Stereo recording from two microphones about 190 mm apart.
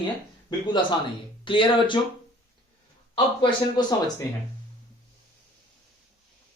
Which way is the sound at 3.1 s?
25° left (ahead or behind).